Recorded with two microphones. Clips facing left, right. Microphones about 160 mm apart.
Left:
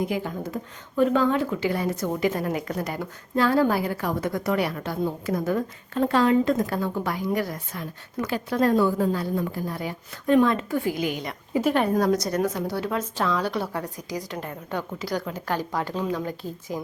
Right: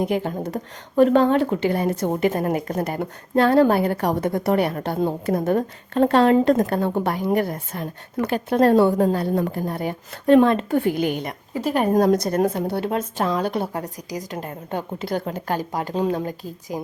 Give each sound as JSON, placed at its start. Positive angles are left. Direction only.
{"t": 0.0, "sound": "a woman's voice", "side_deg": -55}
{"t": 2.2, "sound": "a woman's voice", "side_deg": -40}
{"t": 10.2, "sound": "a woman's voice", "side_deg": -65}
{"t": 11.7, "sound": "a woman's voice", "side_deg": -40}
{"t": 14.9, "sound": "a woman's voice", "side_deg": -55}
{"t": 15.8, "sound": "a woman's voice", "side_deg": -45}